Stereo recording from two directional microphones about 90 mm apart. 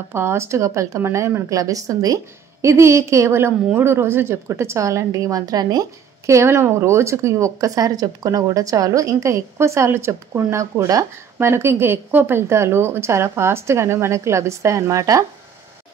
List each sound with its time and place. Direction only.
0.1 s a woman's voice: 30° right (ahead or behind)